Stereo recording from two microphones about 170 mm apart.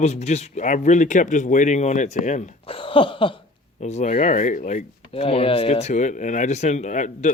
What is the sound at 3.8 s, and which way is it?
Speech, 40° left (ahead or behind).